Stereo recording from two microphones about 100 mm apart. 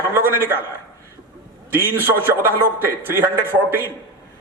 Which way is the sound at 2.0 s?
25° right (ahead or behind).